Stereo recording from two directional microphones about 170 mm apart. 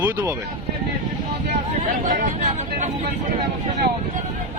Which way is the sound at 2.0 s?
45° right (ahead or behind).